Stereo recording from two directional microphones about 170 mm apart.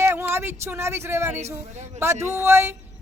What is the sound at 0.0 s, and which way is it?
Speech, 15° right (ahead or behind).